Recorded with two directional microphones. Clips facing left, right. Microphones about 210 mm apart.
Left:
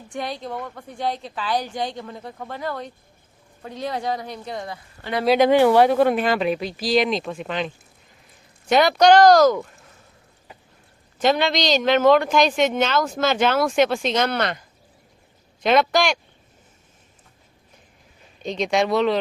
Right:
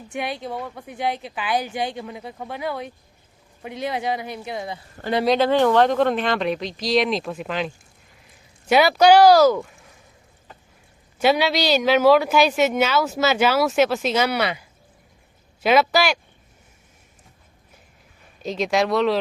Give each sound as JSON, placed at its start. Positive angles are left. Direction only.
{"t": 0.1, "sound": "a woman's voice", "side_deg": -5}
{"t": 5.0, "sound": "speech", "side_deg": -45}
{"t": 5.4, "sound": "a woman's voice", "side_deg": 15}
{"t": 9.6, "sound": "speech", "side_deg": 0}
{"t": 11.2, "sound": "a woman's voice", "side_deg": -10}
{"t": 18.4, "sound": "speech", "side_deg": 0}